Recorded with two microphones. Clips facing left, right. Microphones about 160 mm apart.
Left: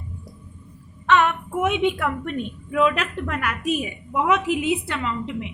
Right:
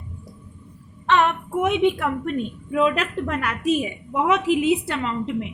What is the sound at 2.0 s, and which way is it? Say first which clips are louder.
A woman's voice: right 2 dB; 35° right (ahead or behind).